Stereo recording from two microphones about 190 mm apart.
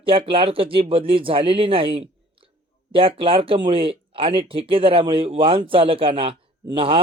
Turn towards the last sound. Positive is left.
turn(degrees=-30)  # may be behind; listen again after turning